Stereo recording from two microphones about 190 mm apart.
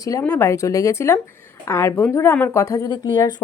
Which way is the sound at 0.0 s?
15° left (ahead or behind).